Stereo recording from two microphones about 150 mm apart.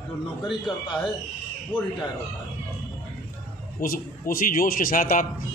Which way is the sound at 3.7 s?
70° left (ahead or behind).